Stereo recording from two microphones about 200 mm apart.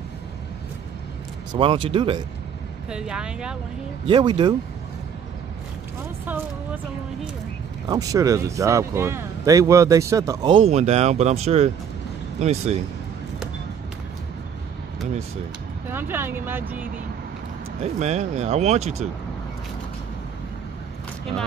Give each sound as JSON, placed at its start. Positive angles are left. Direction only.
{"t": 1.6, "sound": "speech", "side_deg": -25}
{"t": 2.9, "sound": "speech", "side_deg": -5}
{"t": 4.0, "sound": "speech", "side_deg": -25}
{"t": 6.2, "sound": "speech", "side_deg": -10}
{"t": 7.9, "sound": "speech", "side_deg": -15}
{"t": 15.9, "sound": "speech", "side_deg": -10}
{"t": 17.9, "sound": "speech", "side_deg": -35}